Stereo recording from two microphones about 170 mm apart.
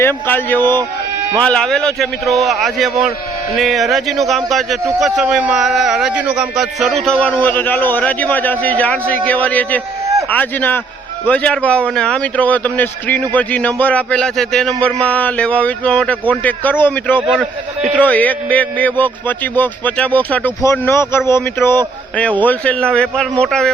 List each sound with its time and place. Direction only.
0.0 s a man's voice: 15° left (ahead or behind)